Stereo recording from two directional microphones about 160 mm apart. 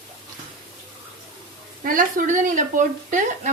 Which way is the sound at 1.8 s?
60° right (ahead or behind).